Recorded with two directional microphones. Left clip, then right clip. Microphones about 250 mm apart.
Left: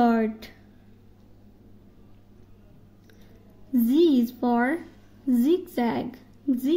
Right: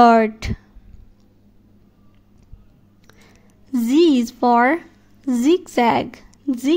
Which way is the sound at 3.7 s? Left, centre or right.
Right.